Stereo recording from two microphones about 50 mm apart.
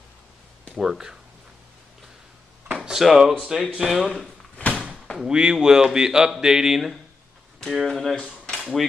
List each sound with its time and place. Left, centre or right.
0.7 s speech: centre
2.7 s drawer open or close: centre
3.0 s speech: centre
4.6 s a sound: left
5.2 s speech: centre
7.8 s speech: centre